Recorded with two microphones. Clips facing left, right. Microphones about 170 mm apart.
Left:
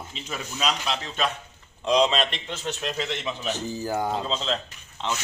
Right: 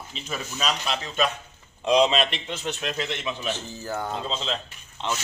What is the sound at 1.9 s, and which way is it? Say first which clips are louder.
Speech: right 1 dB; 10° right (ahead or behind).